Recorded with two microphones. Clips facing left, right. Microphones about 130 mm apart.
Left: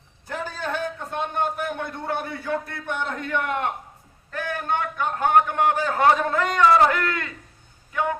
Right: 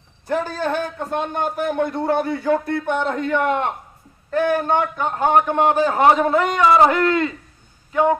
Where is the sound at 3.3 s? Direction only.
30° right (ahead or behind).